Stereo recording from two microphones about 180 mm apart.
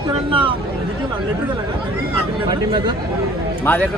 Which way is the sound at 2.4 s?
25° right (ahead or behind).